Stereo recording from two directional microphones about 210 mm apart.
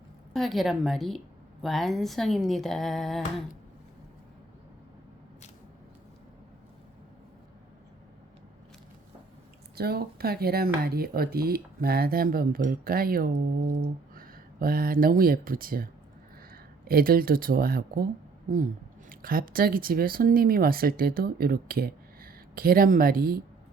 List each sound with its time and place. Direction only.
0.3 s speech: centre (ahead or behind)
9.7 s speech: 45° right (ahead or behind)